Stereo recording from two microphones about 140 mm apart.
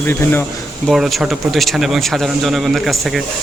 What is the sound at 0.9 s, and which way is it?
Speech, centre (ahead or behind).